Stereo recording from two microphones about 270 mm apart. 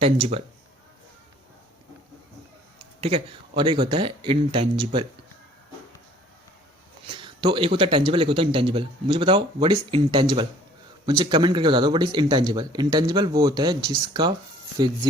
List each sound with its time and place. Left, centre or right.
0.0 s speech: right
3.0 s speech: right
7.2 s speech: centre